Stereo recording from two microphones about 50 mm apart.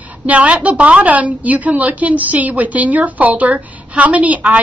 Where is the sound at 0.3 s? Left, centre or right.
Right.